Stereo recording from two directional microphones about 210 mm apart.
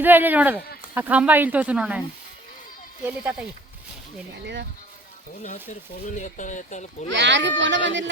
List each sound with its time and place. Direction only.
0.0 s speech: 10° right (ahead or behind)
3.0 s speech: 10° right (ahead or behind)
6.1 s speech: 35° left (ahead or behind)
7.1 s a child's voice: 60° right (ahead or behind)